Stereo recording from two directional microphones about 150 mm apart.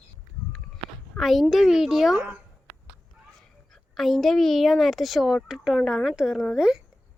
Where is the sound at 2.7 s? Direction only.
45° right (ahead or behind).